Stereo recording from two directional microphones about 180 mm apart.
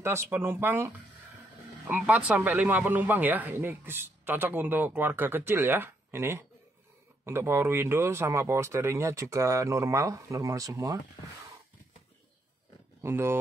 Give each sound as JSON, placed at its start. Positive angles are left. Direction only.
{"t": 0.0, "sound": "a man's voice", "side_deg": -15}
{"t": 13.0, "sound": "a man's voice", "side_deg": -15}